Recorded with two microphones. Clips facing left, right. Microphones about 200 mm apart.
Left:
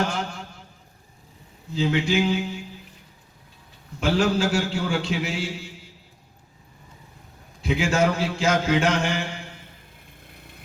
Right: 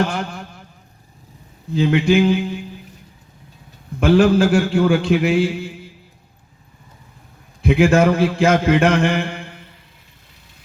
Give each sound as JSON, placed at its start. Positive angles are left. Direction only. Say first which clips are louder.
{"t": 0.0, "sound": "a man's voice", "louder": "right 5 dB", "side_deg": -55}
{"t": 1.7, "sound": "a man's voice", "louder": "right 7 dB", "side_deg": -55}
{"t": 4.0, "sound": "a man's voice", "louder": "right 8 dB", "side_deg": -55}
{"t": 7.6, "sound": "a man's voice", "louder": "right 8 dB", "side_deg": -55}